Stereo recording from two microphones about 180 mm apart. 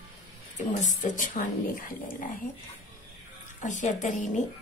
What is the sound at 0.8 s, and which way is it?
A woman's voice, 45° left (ahead or behind).